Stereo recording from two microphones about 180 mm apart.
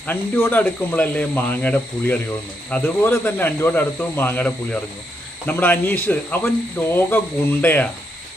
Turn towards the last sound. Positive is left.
turn(degrees=10)  # may be behind; listen again after turning